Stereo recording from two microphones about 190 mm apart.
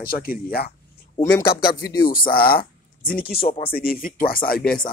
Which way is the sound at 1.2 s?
10° left (ahead or behind).